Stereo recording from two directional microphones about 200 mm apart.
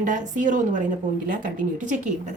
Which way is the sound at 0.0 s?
40° right (ahead or behind).